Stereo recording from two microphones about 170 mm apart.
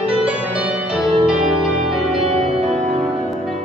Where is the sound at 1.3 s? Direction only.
5° right (ahead or behind).